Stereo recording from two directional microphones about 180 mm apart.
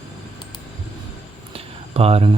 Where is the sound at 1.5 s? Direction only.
35° right (ahead or behind).